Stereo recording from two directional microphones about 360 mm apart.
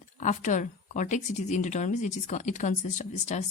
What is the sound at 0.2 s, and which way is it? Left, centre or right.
A woman's voice, centre.